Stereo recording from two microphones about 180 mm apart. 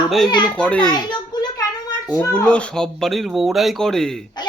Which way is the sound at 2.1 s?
15° left (ahead or behind).